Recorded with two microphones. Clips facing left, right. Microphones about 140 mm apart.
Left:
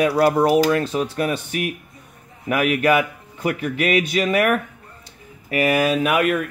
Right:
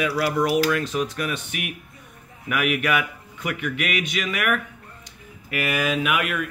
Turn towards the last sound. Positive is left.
turn(degrees=35)  # may be behind; listen again after turning